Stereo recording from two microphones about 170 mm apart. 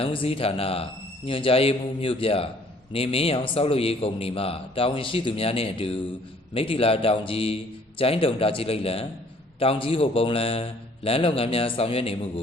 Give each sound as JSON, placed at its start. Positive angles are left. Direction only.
{"t": 0.0, "sound": "a man's voice", "side_deg": 35}